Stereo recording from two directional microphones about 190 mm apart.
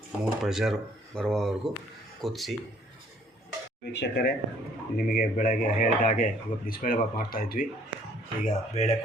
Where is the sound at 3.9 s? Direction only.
60° left (ahead or behind).